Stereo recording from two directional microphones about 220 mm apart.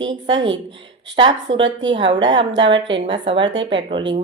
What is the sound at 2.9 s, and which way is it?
Speech, 20° right (ahead or behind).